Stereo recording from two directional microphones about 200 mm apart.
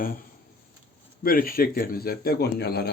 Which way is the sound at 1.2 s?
45° left (ahead or behind).